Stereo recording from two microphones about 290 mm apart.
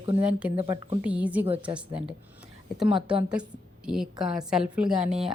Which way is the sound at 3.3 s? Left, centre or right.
Centre.